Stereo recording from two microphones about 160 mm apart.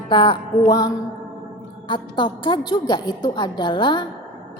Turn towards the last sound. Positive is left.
turn(degrees=30)  # may be behind; listen again after turning